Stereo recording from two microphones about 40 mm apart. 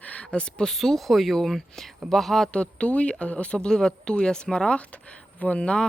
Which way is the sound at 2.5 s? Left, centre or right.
Left.